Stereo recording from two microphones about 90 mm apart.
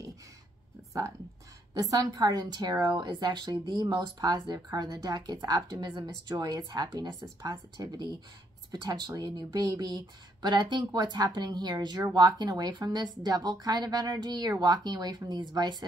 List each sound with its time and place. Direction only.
1.7 s speech: 40° right (ahead or behind)